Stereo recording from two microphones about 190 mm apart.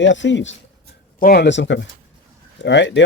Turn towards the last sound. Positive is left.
turn(degrees=70)  # may be behind; listen again after turning